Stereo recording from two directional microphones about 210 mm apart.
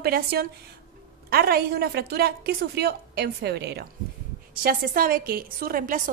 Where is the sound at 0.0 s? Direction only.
45° right (ahead or behind).